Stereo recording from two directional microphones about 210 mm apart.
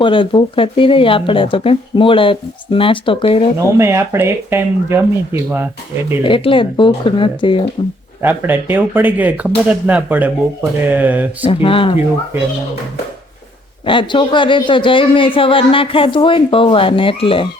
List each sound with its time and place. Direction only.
0.0 s speech: 25° left (ahead or behind)
3.8 s speech: 10° right (ahead or behind)
6.2 s speech: 25° left (ahead or behind)
8.2 s speech: 10° right (ahead or behind)
11.4 s speech: 25° left (ahead or behind)
13.8 s speech: 25° left (ahead or behind)